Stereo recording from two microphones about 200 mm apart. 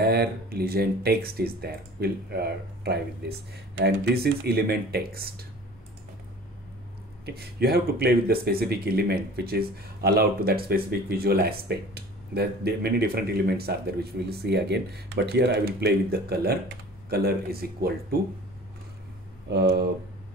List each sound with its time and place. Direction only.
0.0 s speech: 50° right (ahead or behind)
7.2 s speech: 50° right (ahead or behind)
19.5 s speech: 55° right (ahead or behind)